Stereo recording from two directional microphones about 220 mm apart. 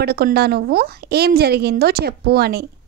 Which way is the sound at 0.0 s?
45° right (ahead or behind).